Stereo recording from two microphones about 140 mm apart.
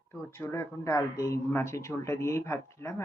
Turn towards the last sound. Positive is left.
turn(degrees=20)  # may be behind; listen again after turning